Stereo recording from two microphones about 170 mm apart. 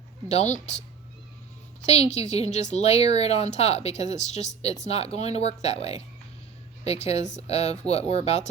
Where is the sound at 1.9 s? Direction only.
40° left (ahead or behind).